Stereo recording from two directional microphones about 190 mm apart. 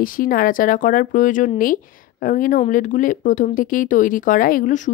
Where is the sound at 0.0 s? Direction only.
45° left (ahead or behind).